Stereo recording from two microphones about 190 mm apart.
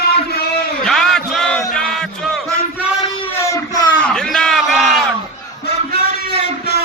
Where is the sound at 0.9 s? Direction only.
Centre (ahead or behind).